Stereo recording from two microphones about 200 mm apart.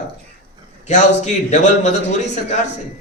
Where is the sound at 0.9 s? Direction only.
35° left (ahead or behind).